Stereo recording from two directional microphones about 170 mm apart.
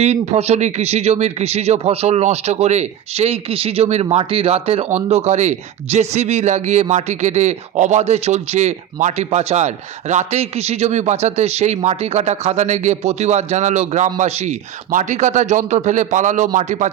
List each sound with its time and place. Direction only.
0.0 s speech: 40° right (ahead or behind)